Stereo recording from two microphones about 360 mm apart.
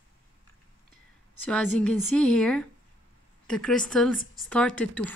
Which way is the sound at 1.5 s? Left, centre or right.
Centre.